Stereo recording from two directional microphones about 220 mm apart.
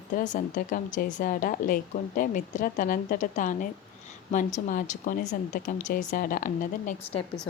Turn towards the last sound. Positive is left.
turn(degrees=35)  # may be behind; listen again after turning